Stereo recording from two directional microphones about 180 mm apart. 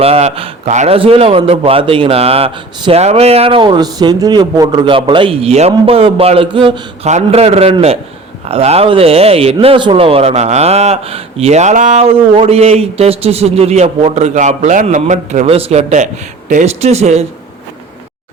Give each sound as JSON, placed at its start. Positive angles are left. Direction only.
{"t": 0.0, "sound": "a man's voice", "side_deg": -35}